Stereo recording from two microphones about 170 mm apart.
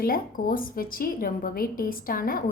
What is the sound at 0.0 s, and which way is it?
A woman's voice, 55° left (ahead or behind).